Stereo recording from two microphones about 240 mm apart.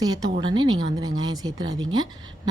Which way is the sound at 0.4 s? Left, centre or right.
Centre.